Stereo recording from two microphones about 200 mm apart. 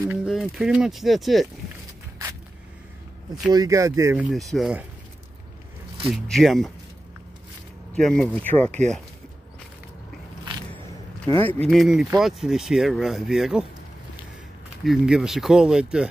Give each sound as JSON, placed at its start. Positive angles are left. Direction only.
{"t": 0.0, "sound": "speech", "side_deg": -10}
{"t": 3.5, "sound": "speech", "side_deg": -15}
{"t": 6.0, "sound": "speech", "side_deg": 0}
{"t": 7.9, "sound": "speech", "side_deg": 5}
{"t": 11.2, "sound": "speech", "side_deg": 10}
{"t": 14.9, "sound": "speech", "side_deg": -5}